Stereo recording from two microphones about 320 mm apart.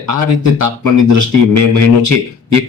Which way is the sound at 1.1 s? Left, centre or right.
Right.